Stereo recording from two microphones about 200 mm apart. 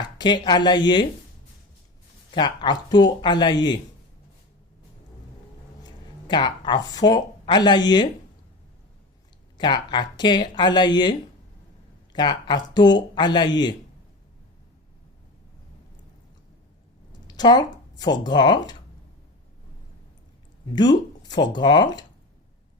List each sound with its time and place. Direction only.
0.0 s speech: 20° left (ahead or behind)
2.3 s speech: 20° left (ahead or behind)
5.8 s speech: 20° left (ahead or behind)
9.6 s speech: 20° left (ahead or behind)
12.1 s speech: 20° left (ahead or behind)
17.2 s speech: 20° left (ahead or behind)
20.7 s speech: 20° left (ahead or behind)